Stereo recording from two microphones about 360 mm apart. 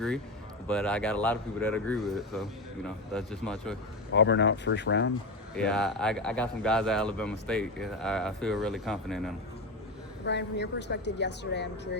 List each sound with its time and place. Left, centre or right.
0.7 s a man's voice: centre
4.1 s a woman's voice: left
5.5 s a man's voice: centre
10.2 s a woman's voice: left